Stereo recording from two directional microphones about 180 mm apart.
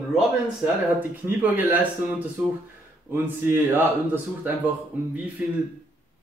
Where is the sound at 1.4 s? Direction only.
10° right (ahead or behind).